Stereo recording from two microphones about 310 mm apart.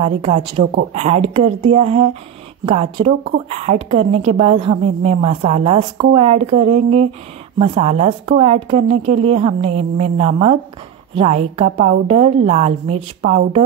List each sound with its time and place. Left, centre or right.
0.0 s a woman's voice: centre